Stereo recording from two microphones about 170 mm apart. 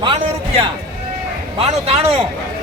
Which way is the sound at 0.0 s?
30° right (ahead or behind).